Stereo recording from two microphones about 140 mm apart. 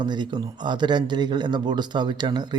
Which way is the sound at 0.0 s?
30° right (ahead or behind).